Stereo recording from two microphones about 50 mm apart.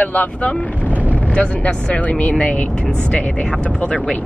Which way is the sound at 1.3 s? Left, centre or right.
Left.